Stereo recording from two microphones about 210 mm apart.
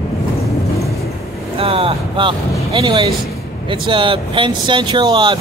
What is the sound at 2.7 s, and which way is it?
Speech, 25° right (ahead or behind).